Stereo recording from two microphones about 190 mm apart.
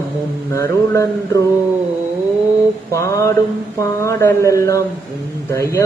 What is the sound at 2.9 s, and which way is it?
Speech, 15° left (ahead or behind).